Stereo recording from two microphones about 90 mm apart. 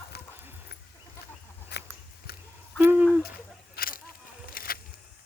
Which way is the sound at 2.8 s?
25° right (ahead or behind).